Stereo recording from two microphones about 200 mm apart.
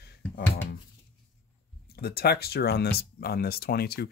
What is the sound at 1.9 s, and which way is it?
Speech, 50° left (ahead or behind).